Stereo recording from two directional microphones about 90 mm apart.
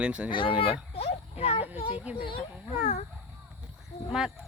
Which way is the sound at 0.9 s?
90° left.